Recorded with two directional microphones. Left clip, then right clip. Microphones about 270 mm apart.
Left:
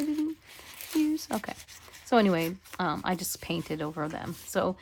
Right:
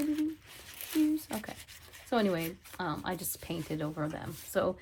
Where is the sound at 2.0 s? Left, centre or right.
Left.